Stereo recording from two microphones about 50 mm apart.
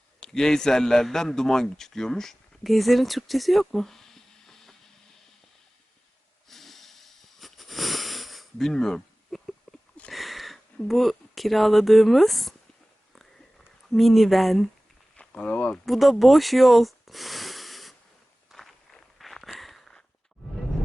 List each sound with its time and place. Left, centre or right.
0.2 s a man's voice: centre
6.5 s a sound: centre
10.8 s speech: centre
13.9 s speech: centre
15.3 s speech: left
15.9 s speech: centre
18.5 s walk: centre
19.2 s a sound: centre